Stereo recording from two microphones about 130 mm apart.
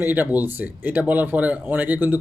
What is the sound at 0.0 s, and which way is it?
Speech, 15° right (ahead or behind).